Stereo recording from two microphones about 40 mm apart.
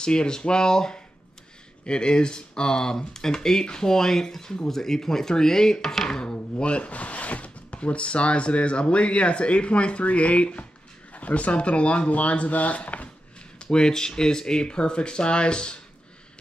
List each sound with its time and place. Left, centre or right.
0.0 s speech: left
6.6 s speech: left
13.6 s speech: centre